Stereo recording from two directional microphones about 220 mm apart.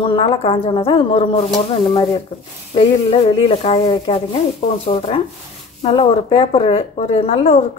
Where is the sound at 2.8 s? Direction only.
25° left (ahead or behind).